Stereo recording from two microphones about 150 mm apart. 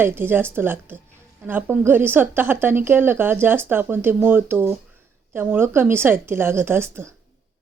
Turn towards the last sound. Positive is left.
turn(degrees=-15)  # may be behind; listen again after turning